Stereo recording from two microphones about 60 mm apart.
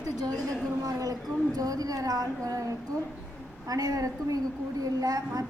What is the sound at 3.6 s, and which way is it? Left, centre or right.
A woman's voice, right.